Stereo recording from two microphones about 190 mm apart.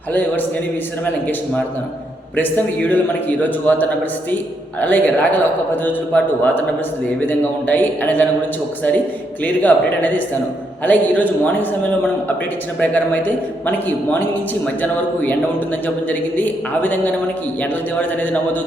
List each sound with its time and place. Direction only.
0.1 s a man's voice: 10° left (ahead or behind)
2.3 s a man's voice: 10° left (ahead or behind)
9.4 s a man's voice: 10° left (ahead or behind)